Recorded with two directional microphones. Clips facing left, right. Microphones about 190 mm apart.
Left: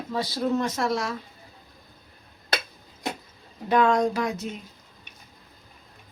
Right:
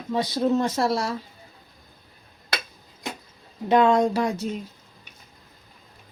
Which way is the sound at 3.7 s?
25° right (ahead or behind).